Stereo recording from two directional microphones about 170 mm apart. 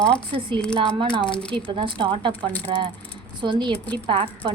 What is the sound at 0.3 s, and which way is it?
A woman's voice, 30° right (ahead or behind).